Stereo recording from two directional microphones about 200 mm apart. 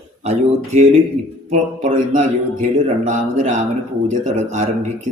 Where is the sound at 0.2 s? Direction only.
35° right (ahead or behind).